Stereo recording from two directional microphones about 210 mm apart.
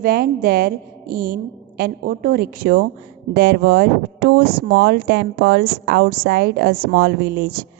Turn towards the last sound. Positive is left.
turn(degrees=-50)  # may be behind; listen again after turning